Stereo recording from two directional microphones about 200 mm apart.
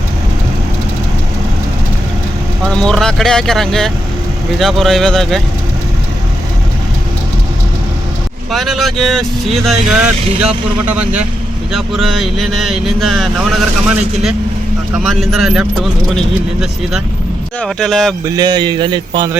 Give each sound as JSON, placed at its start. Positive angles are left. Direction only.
{"t": 2.6, "sound": "speech", "side_deg": 5}
{"t": 8.5, "sound": "speech", "side_deg": 0}
{"t": 17.6, "sound": "speech", "side_deg": 0}
{"t": 18.3, "sound": "a man's voice", "side_deg": -20}